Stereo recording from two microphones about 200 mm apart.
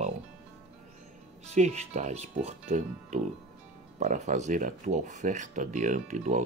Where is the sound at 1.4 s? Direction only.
35° right (ahead or behind).